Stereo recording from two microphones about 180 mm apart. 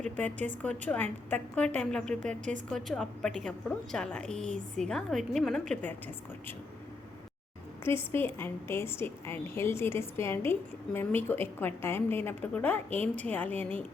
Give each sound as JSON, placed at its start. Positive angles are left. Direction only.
{"t": 0.2, "sound": "a woman's voice", "side_deg": 10}
{"t": 2.2, "sound": "speech", "side_deg": -40}
{"t": 2.6, "sound": "a woman's voice", "side_deg": 0}
{"t": 7.9, "sound": "a woman's voice", "side_deg": 15}